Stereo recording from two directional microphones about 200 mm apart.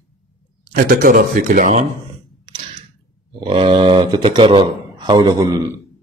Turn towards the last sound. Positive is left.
turn(degrees=-20)  # may be behind; listen again after turning